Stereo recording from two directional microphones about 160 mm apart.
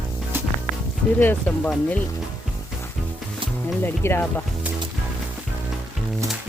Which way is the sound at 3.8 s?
15° left (ahead or behind).